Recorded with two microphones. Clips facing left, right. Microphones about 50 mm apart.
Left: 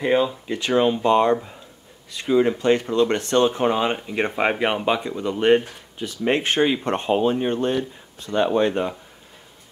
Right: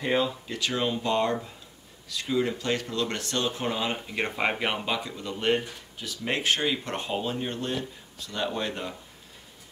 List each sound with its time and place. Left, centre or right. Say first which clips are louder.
0.0 s speech: left 6 dB; centre
0.5 s speech: left 9 dB; left
4.8 s speech: left 9 dB; left